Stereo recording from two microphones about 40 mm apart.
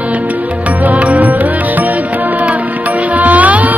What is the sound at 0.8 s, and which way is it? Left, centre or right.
Music, right.